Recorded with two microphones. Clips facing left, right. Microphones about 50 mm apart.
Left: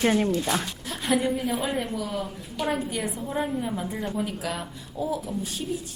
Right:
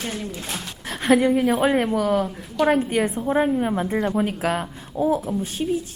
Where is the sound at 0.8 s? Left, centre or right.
Right.